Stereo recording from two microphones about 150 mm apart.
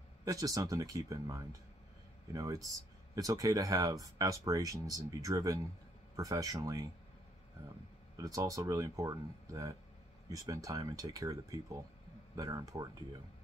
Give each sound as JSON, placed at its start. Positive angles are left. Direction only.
{"t": 0.2, "sound": "speech", "side_deg": -25}
{"t": 8.2, "sound": "speech", "side_deg": -20}